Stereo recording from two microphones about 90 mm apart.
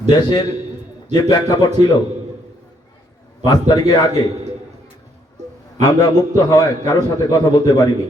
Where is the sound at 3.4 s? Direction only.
45° left (ahead or behind).